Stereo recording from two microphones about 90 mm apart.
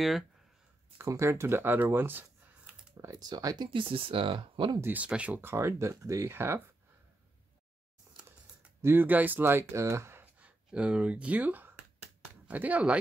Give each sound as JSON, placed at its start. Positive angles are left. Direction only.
{"t": 0.9, "sound": "speech", "side_deg": -35}
{"t": 3.0, "sound": "speech", "side_deg": -40}
{"t": 3.7, "sound": "speech", "side_deg": -80}
{"t": 4.7, "sound": "speech", "side_deg": -25}
{"t": 5.0, "sound": "speech", "side_deg": -15}
{"t": 5.4, "sound": "speech", "side_deg": -30}
{"t": 8.8, "sound": "speech", "side_deg": -20}